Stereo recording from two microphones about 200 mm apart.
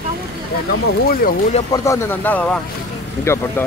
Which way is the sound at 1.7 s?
15° left (ahead or behind).